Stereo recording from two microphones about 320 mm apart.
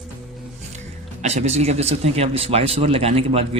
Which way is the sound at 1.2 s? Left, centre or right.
Centre.